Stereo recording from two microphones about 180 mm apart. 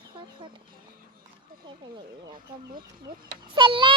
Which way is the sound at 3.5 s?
30° right (ahead or behind).